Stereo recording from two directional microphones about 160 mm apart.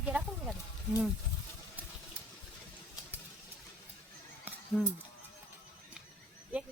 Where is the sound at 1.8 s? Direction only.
10° right (ahead or behind).